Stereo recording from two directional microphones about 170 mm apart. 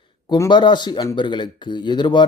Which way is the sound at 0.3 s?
25° left (ahead or behind).